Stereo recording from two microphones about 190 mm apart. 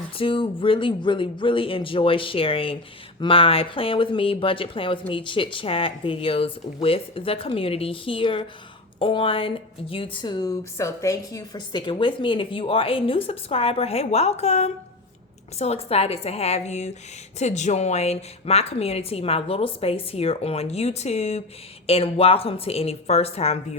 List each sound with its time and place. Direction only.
0.2 s a woman's voice: 30° left (ahead or behind)